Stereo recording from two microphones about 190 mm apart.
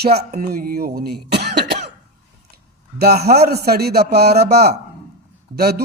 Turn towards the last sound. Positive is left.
turn(degrees=-55)  # may be behind; listen again after turning